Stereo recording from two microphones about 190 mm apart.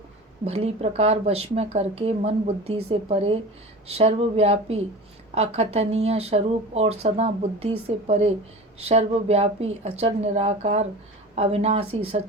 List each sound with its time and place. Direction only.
0.4 s speech: 35° right (ahead or behind)